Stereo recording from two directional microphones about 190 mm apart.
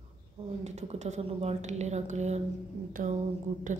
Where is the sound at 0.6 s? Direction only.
35° right (ahead or behind).